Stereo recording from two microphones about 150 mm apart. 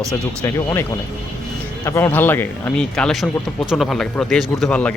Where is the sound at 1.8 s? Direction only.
15° left (ahead or behind).